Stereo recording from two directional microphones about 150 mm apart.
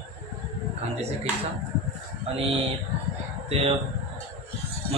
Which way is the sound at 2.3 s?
40° right (ahead or behind).